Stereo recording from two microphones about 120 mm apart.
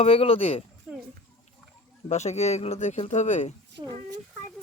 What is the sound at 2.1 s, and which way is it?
Speech, 70° left (ahead or behind).